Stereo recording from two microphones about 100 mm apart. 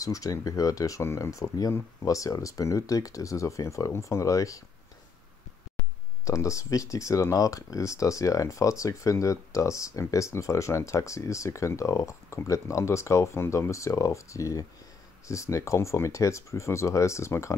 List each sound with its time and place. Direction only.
0.0 s speech: 35° left (ahead or behind)
6.2 s speech: 30° left (ahead or behind)